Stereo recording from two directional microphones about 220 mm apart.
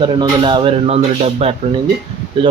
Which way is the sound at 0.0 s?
20° right (ahead or behind).